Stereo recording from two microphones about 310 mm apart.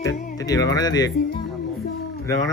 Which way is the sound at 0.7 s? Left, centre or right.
Centre.